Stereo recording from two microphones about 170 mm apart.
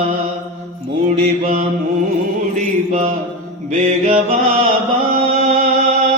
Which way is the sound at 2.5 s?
45° right (ahead or behind).